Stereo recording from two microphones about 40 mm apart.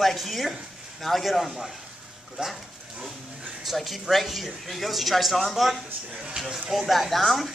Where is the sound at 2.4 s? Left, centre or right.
Centre.